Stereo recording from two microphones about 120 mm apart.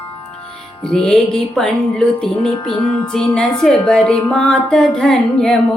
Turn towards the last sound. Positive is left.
turn(degrees=5)  # may be behind; listen again after turning